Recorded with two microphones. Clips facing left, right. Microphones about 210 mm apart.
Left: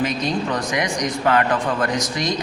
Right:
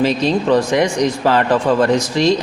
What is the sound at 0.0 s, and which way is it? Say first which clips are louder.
Speech: right 6 dB; 30° right (ahead or behind).